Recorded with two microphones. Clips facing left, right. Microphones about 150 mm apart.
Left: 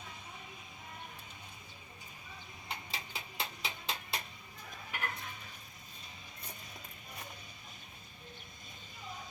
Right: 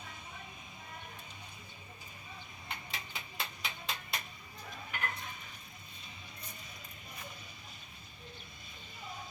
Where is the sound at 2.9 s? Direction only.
30° left (ahead or behind).